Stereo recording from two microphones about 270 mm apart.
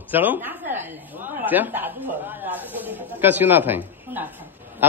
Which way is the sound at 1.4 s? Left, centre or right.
Centre.